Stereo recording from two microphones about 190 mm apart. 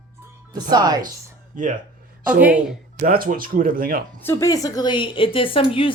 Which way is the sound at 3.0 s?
50° right (ahead or behind).